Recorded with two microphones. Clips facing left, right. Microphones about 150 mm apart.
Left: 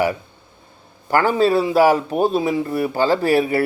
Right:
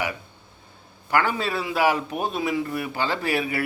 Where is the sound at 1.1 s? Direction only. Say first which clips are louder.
Left 8 dB; 40° left (ahead or behind).